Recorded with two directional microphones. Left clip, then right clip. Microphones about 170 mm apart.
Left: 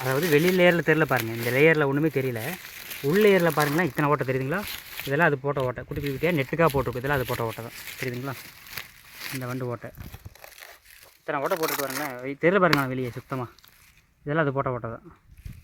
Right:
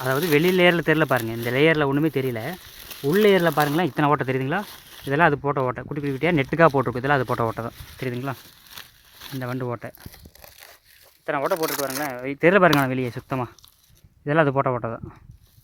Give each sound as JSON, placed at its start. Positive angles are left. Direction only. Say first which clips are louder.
{"t": 0.0, "sound": "speech", "louder": "right 2 dB", "side_deg": -60}
{"t": 9.4, "sound": "speech", "louder": "right 6 dB", "side_deg": -80}
{"t": 11.3, "sound": "speech", "louder": "right 3 dB", "side_deg": -80}